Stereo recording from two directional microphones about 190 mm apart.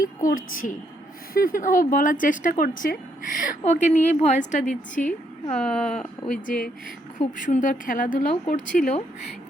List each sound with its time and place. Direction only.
0.0 s a woman's voice: 45° left (ahead or behind)
5.5 s speech: 5° left (ahead or behind)
6.3 s speech: 45° left (ahead or behind)